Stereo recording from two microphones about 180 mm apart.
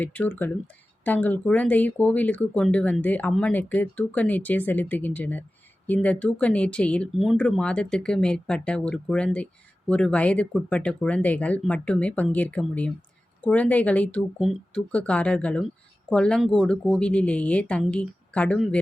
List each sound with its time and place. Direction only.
0.0 s speech: 10° left (ahead or behind)